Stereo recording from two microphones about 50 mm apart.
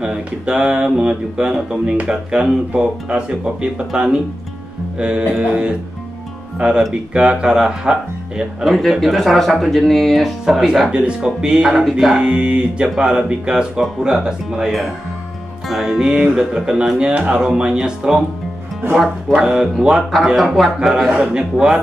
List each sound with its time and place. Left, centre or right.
0.0 s speech: right
8.6 s speech: centre
10.4 s speech: centre
10.9 s speech: centre
12.2 s speech: centre
15.7 s speech: centre
17.0 s speech: right
17.4 s speech: centre
19.2 s speech: centre
20.5 s speech: centre